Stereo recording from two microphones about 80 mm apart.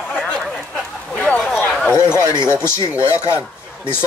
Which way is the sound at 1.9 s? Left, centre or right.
Left.